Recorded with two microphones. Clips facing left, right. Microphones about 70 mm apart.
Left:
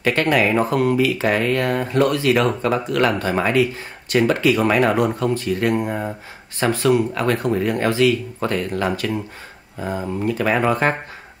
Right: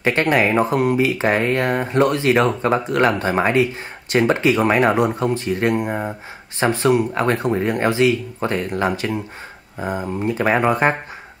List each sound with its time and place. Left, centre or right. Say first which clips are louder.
0.0 s speech: right 1 dB; right